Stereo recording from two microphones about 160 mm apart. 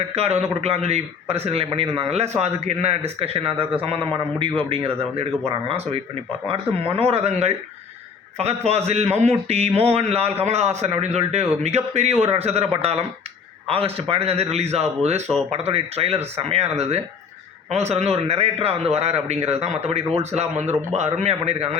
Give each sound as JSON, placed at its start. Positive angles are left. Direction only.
{"t": 0.1, "sound": "a man's voice", "side_deg": -40}